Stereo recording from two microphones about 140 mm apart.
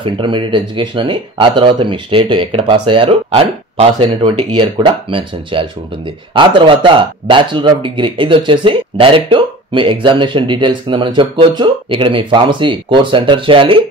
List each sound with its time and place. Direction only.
0.0 s speech: 35° right (ahead or behind)